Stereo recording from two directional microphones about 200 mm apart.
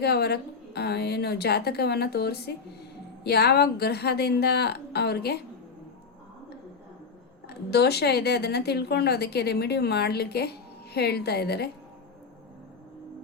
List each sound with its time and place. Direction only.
0.0 s a woman's voice: 55° left (ahead or behind)
7.4 s a woman's voice: 55° left (ahead or behind)